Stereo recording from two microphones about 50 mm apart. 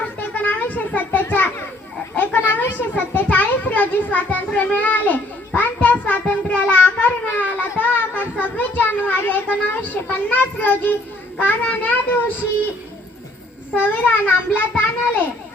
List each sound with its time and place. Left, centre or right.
0.3 s a sound: left
1.3 s children playing: left
5.5 s child singing: left
11.3 s a sound: left
13.7 s a child's voice: left
14.8 s children playing: left